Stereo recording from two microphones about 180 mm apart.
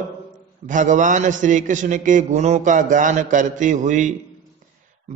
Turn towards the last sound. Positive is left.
turn(degrees=-45)  # may be behind; listen again after turning